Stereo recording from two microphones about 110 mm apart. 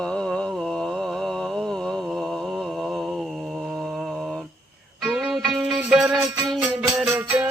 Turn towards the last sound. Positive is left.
turn(degrees=-15)  # may be behind; listen again after turning